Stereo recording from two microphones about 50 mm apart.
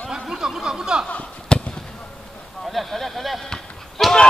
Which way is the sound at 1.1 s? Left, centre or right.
Left.